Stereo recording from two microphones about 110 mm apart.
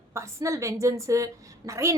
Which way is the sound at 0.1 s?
25° right (ahead or behind).